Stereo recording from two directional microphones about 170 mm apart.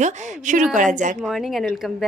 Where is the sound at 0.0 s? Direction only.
45° right (ahead or behind).